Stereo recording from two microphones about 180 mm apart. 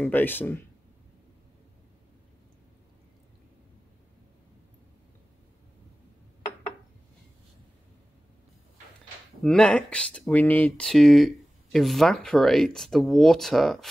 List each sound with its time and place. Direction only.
0.0 s speech: 10° left (ahead or behind)
9.4 s speech: 5° left (ahead or behind)